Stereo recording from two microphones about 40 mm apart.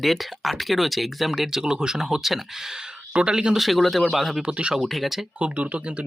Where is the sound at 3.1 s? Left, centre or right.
Right.